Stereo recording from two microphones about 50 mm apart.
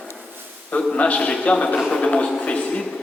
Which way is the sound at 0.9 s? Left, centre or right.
Left.